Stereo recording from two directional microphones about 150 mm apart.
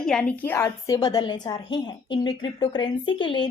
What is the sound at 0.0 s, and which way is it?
A woman's voice, 5° left (ahead or behind).